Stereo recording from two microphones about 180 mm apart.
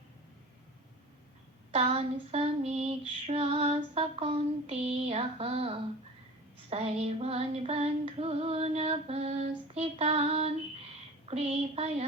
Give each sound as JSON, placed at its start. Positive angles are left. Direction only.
{"t": 1.7, "sound": "female singing", "side_deg": -35}